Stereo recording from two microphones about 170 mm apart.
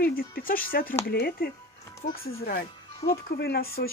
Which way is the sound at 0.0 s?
60° left (ahead or behind).